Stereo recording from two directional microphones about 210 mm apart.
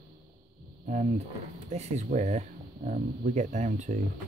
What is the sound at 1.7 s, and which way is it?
Speech, 35° right (ahead or behind).